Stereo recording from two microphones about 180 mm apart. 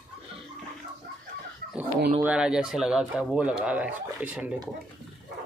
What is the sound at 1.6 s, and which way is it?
Chicken, 55° right (ahead or behind).